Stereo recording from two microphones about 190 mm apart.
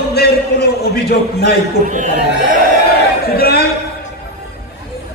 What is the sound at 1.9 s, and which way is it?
Speech, 40° right (ahead or behind).